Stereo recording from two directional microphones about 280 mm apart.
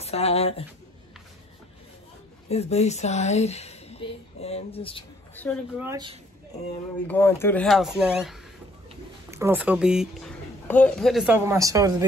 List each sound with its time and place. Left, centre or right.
0.0 s speech: left
2.5 s speech: left
5.3 s speech: centre
5.8 s speech: centre
7.1 s speech: centre